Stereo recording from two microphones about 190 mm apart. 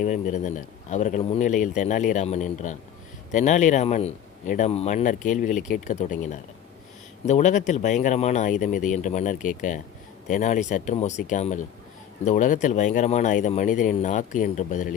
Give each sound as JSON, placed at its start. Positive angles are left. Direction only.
{"t": 0.0, "sound": "speech", "side_deg": 40}